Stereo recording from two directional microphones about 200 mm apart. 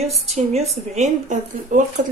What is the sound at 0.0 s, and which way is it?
A woman's voice, 35° right (ahead or behind).